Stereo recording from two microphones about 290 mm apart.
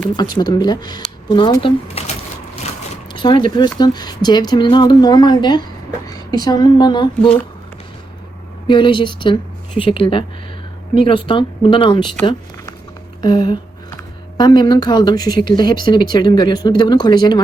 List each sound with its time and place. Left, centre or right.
0.0 s a woman's voice: centre
2.9 s a sound: centre
3.5 s a woman's voice: centre
7.2 s speech: centre
8.6 s a woman's voice: centre
12.2 s zipper: centre
13.2 s a woman's voice: centre